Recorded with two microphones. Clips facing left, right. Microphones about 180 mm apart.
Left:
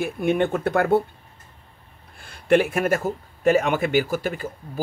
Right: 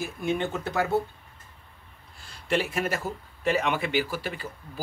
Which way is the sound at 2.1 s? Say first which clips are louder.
Left 9 dB; 55° left (ahead or behind).